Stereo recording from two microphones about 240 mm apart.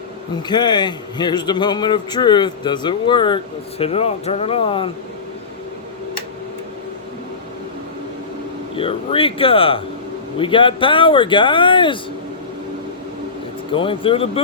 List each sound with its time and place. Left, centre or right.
0.4 s a man's voice: centre
8.7 s speech: left
13.7 s speech: left